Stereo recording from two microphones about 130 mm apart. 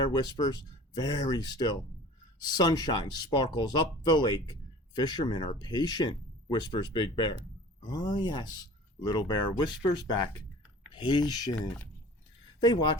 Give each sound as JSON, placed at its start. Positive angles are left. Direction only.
{"t": 0.0, "sound": "speech", "side_deg": 35}